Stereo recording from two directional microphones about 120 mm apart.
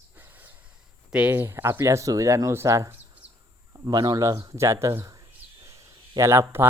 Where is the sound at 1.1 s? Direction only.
15° right (ahead or behind).